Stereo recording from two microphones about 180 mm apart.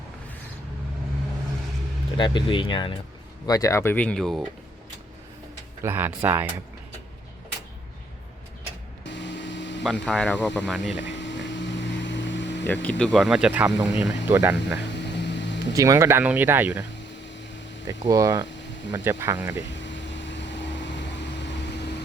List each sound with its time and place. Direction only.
2.1 s speech: 25° left (ahead or behind); by 4.4 s centre (ahead or behind)
5.8 s speech: 10° right (ahead or behind)
9.0 s a sound: 80° left
9.8 s speech: 5° left (ahead or behind)
10.9 s boat: 85° left
12.6 s speech: 10° left (ahead or behind)
14.1 s speech: 15° right (ahead or behind)
14.8 s hum: 75° left (ahead or behind)
15.7 s speech: 20° right (ahead or behind)
17.8 s speech: 20° right (ahead or behind)
19.7 s vehicle: 85° left